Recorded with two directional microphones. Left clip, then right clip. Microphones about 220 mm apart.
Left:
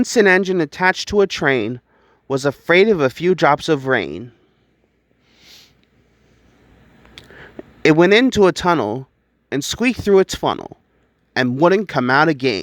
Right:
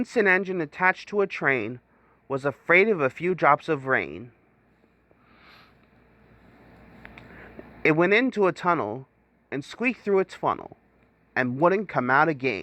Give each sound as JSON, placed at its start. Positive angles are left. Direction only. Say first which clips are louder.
{"t": 0.0, "sound": "speech", "louder": "left 8 dB", "side_deg": 40}
{"t": 5.3, "sound": "a sound", "louder": "left 7 dB", "side_deg": 40}
{"t": 7.2, "sound": "speech", "louder": "left 10 dB", "side_deg": 40}